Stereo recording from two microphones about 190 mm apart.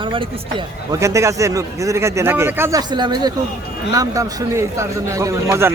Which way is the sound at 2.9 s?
25° right (ahead or behind).